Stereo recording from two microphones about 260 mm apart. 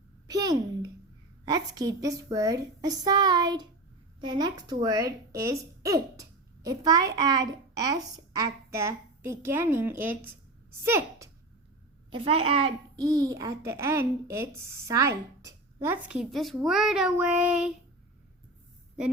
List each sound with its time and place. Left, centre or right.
0.3 s a sound: centre
1.5 s a woman's voice: centre
12.1 s a woman's voice: right; by 17.7 s centre